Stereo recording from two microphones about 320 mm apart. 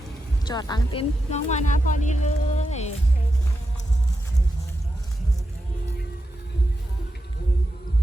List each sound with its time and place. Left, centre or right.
0.4 s speech: centre